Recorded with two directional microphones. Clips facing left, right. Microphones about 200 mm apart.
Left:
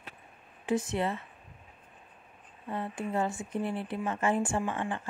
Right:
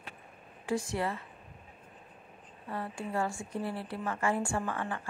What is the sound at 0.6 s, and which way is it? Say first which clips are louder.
Speech: left 3 dB; 20° left (ahead or behind).